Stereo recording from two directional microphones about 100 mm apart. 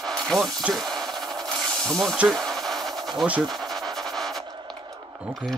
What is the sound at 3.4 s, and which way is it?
Pant, centre (ahead or behind).